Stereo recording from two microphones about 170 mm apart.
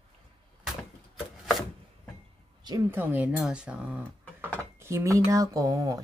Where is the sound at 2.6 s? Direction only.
15° right (ahead or behind).